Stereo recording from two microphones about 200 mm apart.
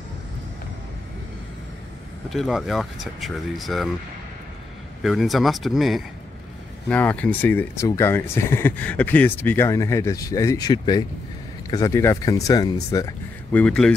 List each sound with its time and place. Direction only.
2.3 s speech: centre (ahead or behind)
5.0 s speech: centre (ahead or behind)